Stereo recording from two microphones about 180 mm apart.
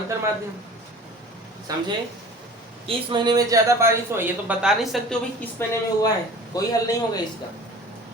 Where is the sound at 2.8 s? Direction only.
25° right (ahead or behind); by 5.1 s centre (ahead or behind).